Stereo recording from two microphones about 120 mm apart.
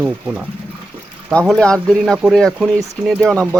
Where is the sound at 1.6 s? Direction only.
5° left (ahead or behind).